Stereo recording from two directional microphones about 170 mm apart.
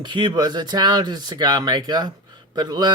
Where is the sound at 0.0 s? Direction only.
30° right (ahead or behind).